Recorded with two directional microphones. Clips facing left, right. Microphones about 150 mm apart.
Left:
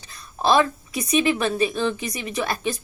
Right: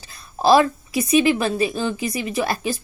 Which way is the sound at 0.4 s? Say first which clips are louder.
Right 4 dB; 35° right (ahead or behind).